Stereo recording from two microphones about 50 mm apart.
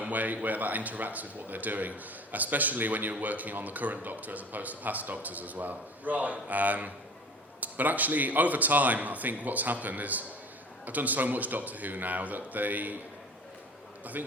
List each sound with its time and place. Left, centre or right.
0.0 s a man's voice: right
14.0 s a man's voice: right